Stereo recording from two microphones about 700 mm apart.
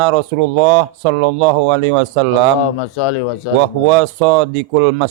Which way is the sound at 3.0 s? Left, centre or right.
Left.